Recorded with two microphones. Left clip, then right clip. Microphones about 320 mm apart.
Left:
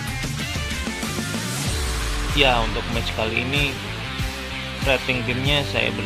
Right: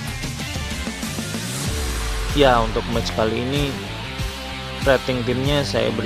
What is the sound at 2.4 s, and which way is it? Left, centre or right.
Speech, right.